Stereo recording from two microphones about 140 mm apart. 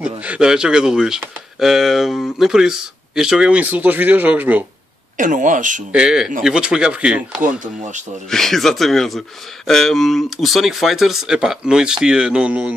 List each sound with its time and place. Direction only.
0.0 s a man's voice: 10° right (ahead or behind)
5.1 s speech: 65° right (ahead or behind)
5.9 s a man's voice: 5° right (ahead or behind)
7.4 s speech: 65° right (ahead or behind)
8.3 s a man's voice: centre (ahead or behind)